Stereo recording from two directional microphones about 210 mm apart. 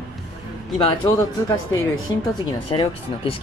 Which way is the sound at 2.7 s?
25° left (ahead or behind).